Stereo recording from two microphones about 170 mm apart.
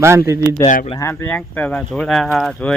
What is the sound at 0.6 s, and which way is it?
Speech, 50° left (ahead or behind).